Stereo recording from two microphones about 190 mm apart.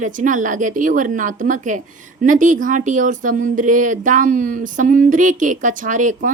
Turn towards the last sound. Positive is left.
turn(degrees=-40)  # may be behind; listen again after turning